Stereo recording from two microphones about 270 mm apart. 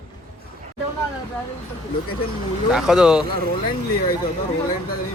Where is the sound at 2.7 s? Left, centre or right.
Centre.